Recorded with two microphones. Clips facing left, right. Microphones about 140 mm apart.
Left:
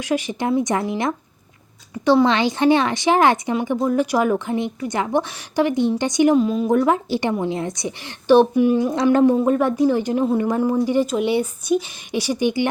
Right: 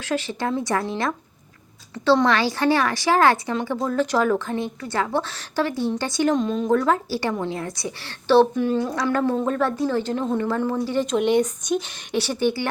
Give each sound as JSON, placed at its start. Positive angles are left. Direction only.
{"t": 0.0, "sound": "a woman's voice", "side_deg": 15}